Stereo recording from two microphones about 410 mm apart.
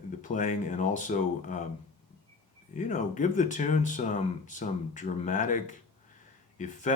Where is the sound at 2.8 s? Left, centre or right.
Centre.